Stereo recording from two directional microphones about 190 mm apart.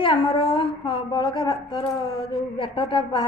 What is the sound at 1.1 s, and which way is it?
A woman's voice, 20° left (ahead or behind).